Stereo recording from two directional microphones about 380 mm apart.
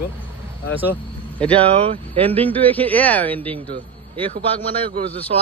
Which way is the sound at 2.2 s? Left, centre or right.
Centre.